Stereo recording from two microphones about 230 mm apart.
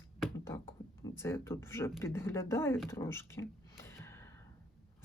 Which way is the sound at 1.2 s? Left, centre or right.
Centre.